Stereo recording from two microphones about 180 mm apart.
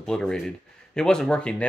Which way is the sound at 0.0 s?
5° left (ahead or behind).